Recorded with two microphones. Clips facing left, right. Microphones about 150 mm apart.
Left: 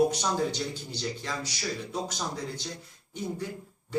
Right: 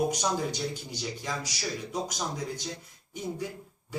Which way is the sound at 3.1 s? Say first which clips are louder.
Even; 10° right (ahead or behind).